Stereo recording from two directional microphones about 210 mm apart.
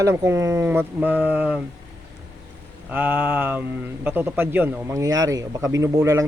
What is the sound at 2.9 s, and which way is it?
Speech, 10° right (ahead or behind).